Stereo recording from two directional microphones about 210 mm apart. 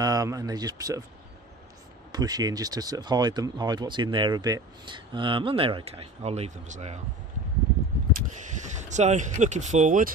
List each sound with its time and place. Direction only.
0.0 s speech: 15° right (ahead or behind)
2.1 s speech: 20° right (ahead or behind); by 7.0 s 35° right (ahead or behind)
8.5 s speech: 35° right (ahead or behind)